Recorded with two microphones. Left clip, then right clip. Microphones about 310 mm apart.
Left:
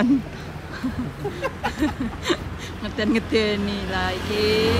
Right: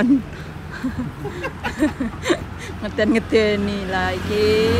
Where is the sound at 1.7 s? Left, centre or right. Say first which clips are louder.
Right 3 dB; centre.